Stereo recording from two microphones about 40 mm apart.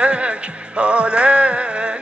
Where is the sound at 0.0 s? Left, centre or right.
Right.